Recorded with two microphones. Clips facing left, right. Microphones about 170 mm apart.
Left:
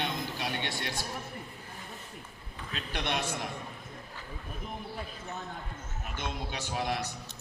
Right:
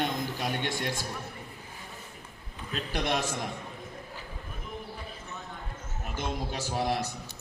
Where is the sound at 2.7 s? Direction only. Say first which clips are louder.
Right 4 dB; 40° right (ahead or behind).